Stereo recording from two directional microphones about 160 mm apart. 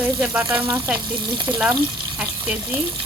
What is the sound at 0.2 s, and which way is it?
Frying, 5° right (ahead or behind).